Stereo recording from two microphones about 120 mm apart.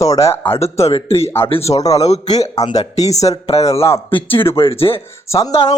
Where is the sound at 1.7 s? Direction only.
30° left (ahead or behind).